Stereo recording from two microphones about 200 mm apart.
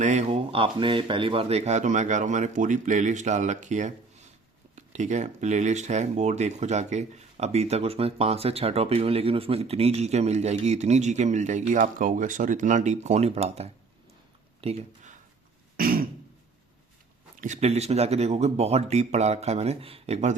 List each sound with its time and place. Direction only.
0.0 s speech: 35° right (ahead or behind)
15.8 s throat clearing: 45° right (ahead or behind)
17.3 s speech: 40° right (ahead or behind)